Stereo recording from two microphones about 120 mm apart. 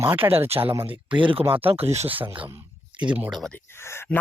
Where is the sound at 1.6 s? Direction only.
55° right (ahead or behind).